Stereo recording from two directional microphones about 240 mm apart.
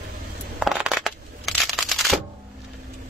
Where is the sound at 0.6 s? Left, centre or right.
Centre.